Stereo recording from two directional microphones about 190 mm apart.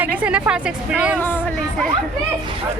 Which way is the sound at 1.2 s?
10° left (ahead or behind).